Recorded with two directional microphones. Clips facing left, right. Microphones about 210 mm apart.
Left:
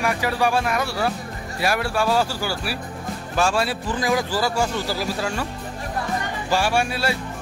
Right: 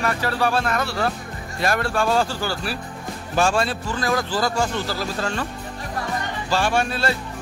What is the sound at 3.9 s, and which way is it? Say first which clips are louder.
Speech: left 3 dB; 15° left (ahead or behind).